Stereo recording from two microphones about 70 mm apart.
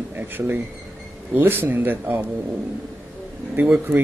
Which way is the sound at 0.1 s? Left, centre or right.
Right.